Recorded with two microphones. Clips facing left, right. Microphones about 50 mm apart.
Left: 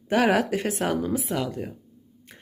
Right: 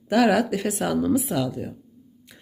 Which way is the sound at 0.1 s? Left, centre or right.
Left.